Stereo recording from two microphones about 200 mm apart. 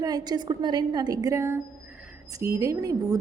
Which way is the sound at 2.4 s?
15° right (ahead or behind).